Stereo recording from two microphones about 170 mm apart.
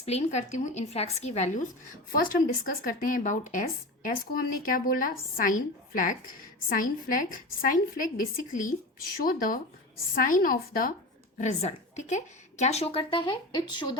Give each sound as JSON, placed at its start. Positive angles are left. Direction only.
{"t": 0.0, "sound": "a woman's voice", "side_deg": 40}
{"t": 2.1, "sound": "speech", "side_deg": 55}
{"t": 4.0, "sound": "speech", "side_deg": 60}
{"t": 11.3, "sound": "a woman's voice", "side_deg": 45}